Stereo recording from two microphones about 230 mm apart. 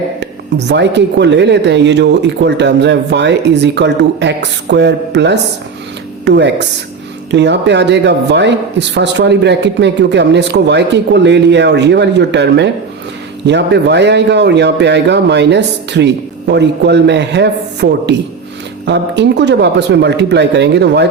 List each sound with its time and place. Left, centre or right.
0.2 s a man's voice: right